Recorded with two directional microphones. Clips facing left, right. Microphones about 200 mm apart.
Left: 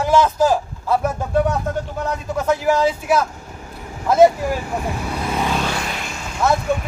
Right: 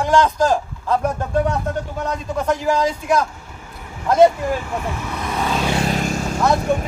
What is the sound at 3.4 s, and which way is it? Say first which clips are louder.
Vehicle: left 3 dB; 40° left (ahead or behind).